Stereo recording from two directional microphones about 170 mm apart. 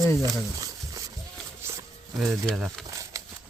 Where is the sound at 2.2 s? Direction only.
Centre (ahead or behind).